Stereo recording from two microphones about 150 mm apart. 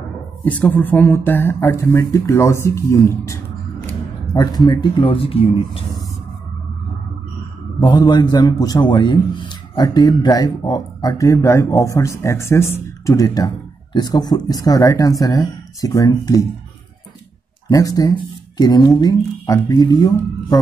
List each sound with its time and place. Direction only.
0.5 s speech: 10° left (ahead or behind); by 5.9 s 40° left (ahead or behind)
7.8 s a man's voice: 25° left (ahead or behind)
17.6 s a man's voice: 25° left (ahead or behind)